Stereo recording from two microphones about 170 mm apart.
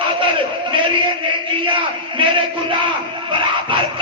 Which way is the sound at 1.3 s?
30° right (ahead or behind).